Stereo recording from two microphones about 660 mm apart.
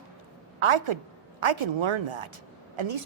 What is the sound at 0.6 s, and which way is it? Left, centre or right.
Speech, right.